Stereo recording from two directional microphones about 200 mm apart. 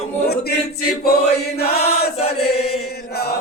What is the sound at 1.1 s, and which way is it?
Chant, 50° left (ahead or behind).